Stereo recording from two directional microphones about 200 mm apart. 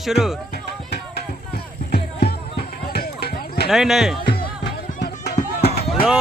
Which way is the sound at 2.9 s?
50° left (ahead or behind).